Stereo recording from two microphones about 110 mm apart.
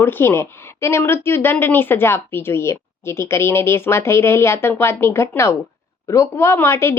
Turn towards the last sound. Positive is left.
turn(degrees=25)  # may be behind; listen again after turning